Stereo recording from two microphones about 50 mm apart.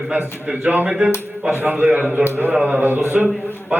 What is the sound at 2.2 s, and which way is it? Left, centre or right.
Speech, right.